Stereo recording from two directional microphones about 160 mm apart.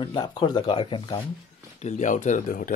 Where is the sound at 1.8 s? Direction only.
50° left (ahead or behind).